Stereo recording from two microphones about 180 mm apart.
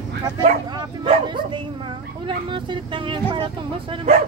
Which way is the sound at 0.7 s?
25° right (ahead or behind).